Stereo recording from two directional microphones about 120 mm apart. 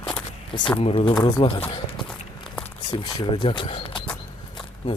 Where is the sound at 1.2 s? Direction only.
35° left (ahead or behind).